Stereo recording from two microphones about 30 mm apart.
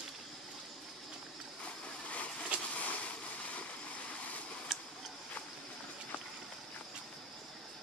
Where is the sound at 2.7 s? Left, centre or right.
Left.